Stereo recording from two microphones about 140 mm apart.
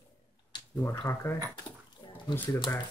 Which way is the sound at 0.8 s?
20° left (ahead or behind).